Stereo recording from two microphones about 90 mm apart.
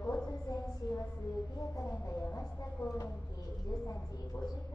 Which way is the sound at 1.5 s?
35° left (ahead or behind).